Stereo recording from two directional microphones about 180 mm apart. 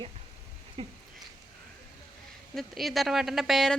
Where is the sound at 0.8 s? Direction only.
30° right (ahead or behind).